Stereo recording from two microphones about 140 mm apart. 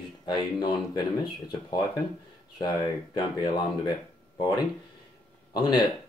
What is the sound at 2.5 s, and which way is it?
Speech, 30° left (ahead or behind).